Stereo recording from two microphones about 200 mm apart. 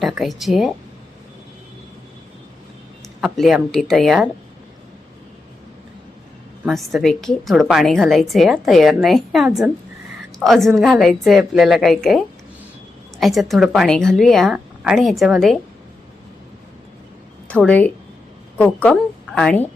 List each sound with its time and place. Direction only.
0.0 s a woman's voice: centre (ahead or behind)
3.2 s a woman's voice: centre (ahead or behind)
6.7 s a woman's voice: centre (ahead or behind)
17.5 s a woman's voice: 5° left (ahead or behind)